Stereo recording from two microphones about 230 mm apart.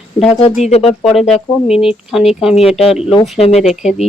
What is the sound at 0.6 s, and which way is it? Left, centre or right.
Speech, left.